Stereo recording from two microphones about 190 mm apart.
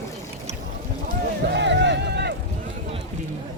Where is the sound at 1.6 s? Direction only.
70° right (ahead or behind).